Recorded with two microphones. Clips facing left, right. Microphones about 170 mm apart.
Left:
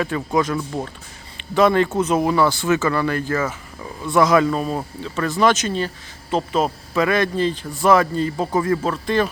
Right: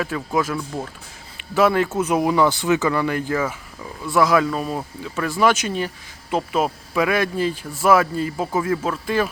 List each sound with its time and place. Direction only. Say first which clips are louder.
0.0 s speech: left 2 dB; centre (ahead or behind)
4.1 s speech: left 2 dB; 5° right (ahead or behind)